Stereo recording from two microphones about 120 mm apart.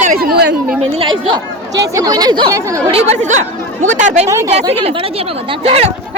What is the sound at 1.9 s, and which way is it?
Speech, 35° right (ahead or behind).